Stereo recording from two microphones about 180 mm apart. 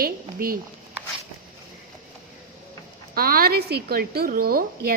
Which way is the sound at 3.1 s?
55° right (ahead or behind).